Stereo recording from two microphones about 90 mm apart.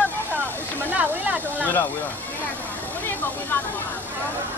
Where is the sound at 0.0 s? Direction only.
20° left (ahead or behind).